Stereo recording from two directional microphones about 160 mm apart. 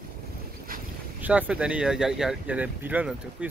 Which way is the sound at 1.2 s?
10° right (ahead or behind).